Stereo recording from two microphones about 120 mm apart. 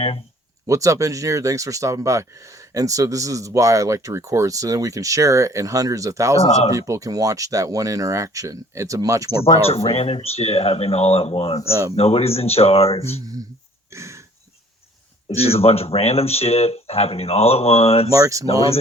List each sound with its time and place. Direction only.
0.7 s speech: 25° right (ahead or behind)
9.4 s speech: 55° left (ahead or behind)
11.7 s speech: 30° right (ahead or behind)
11.9 s speech: 55° left (ahead or behind)
13.2 s speech: 30° right (ahead or behind)
13.9 s throat clearing: 25° right (ahead or behind)
15.4 s speech: 55° left (ahead or behind)
18.1 s speech: 25° right (ahead or behind)